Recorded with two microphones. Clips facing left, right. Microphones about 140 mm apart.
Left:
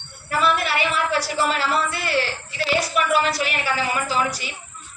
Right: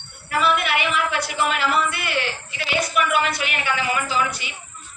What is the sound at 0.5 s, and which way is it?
A woman's voice, 35° left (ahead or behind).